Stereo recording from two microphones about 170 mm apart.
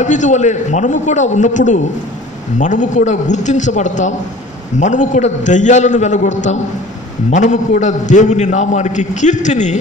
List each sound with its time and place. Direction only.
0.0 s a man's voice: 45° left (ahead or behind)